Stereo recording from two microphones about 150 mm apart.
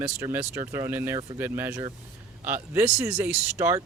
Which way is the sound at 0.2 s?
20° right (ahead or behind).